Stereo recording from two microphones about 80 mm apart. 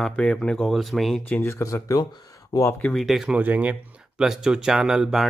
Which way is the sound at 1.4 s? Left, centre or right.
Left.